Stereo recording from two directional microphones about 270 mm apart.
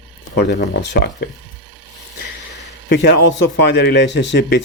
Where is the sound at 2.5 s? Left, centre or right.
Left.